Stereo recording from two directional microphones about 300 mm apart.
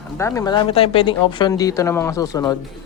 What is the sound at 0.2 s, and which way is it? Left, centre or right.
Speech, centre.